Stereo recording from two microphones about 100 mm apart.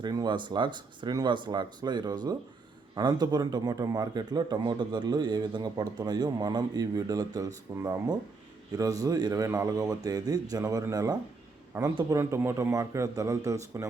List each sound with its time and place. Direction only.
0.0 s a man's voice: 45° right (ahead or behind)